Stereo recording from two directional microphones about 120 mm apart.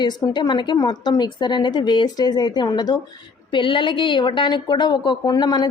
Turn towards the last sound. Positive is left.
turn(degrees=35)  # may be behind; listen again after turning